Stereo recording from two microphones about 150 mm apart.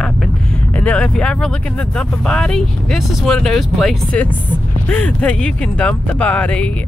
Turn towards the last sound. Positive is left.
turn(degrees=10)  # may be behind; listen again after turning